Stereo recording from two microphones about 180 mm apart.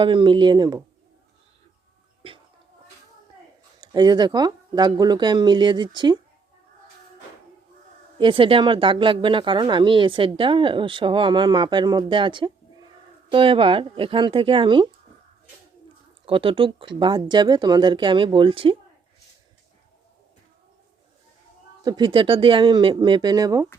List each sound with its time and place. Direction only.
0.0 s speech: 25° right (ahead or behind)
3.8 s speech: 25° right (ahead or behind)
8.2 s speech: 30° right (ahead or behind)
16.2 s speech: 30° right (ahead or behind)
21.8 s speech: 25° right (ahead or behind)